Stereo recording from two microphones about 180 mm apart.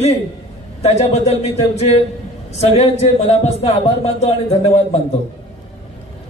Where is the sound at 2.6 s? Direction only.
35° left (ahead or behind).